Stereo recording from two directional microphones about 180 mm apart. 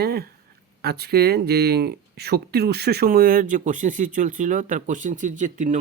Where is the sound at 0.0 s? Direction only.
60° right (ahead or behind).